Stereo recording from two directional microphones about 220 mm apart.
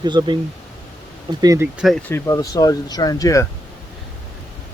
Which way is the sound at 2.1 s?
15° left (ahead or behind).